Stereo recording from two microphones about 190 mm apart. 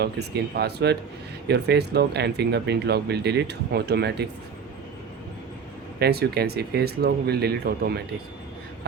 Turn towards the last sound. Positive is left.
turn(degrees=-55)  # may be behind; listen again after turning